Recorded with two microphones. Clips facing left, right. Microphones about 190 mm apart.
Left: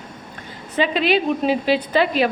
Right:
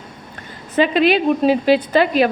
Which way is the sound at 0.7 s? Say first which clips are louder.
Right 4 dB; 50° right (ahead or behind).